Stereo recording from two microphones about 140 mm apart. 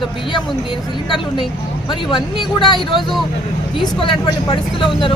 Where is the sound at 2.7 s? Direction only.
Centre (ahead or behind).